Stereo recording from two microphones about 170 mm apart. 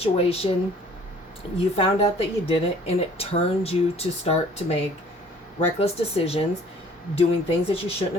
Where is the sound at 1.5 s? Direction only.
35° left (ahead or behind).